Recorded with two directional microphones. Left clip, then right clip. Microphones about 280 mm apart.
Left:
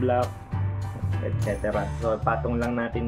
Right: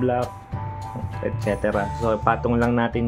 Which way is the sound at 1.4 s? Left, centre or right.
Right.